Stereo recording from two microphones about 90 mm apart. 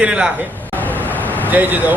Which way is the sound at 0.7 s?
20° left (ahead or behind).